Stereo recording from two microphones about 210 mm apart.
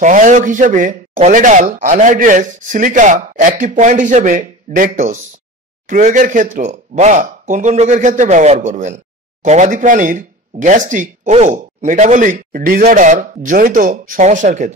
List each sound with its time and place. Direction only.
0.0 s speech: 35° right (ahead or behind)